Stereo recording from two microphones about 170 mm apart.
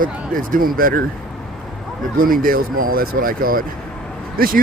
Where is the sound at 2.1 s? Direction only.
55° right (ahead or behind).